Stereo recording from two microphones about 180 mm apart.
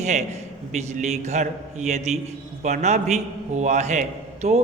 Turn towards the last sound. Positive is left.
turn(degrees=-40)  # may be behind; listen again after turning